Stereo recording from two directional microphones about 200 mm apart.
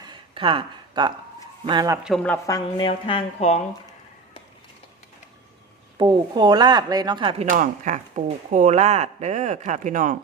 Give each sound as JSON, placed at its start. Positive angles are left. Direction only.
{"t": 0.0, "sound": "a sound", "side_deg": -25}
{"t": 1.6, "sound": "speech", "side_deg": -20}
{"t": 2.0, "sound": "a woman's voice", "side_deg": 5}
{"t": 2.7, "sound": "speech", "side_deg": 25}
{"t": 6.0, "sound": "speech", "side_deg": -20}
{"t": 7.4, "sound": "speech", "side_deg": -40}